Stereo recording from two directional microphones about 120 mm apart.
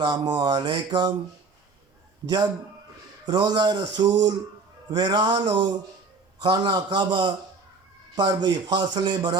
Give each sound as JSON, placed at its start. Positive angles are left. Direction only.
{"t": 0.0, "sound": "a man's voice", "side_deg": -35}
{"t": 3.2, "sound": "a man's voice", "side_deg": -35}